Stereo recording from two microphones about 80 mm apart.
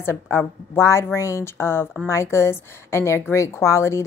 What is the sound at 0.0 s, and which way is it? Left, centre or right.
A woman's voice, left.